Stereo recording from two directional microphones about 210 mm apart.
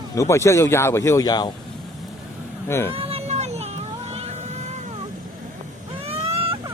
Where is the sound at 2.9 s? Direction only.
25° right (ahead or behind).